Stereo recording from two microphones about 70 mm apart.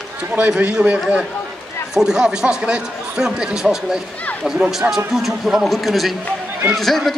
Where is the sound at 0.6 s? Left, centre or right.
Centre.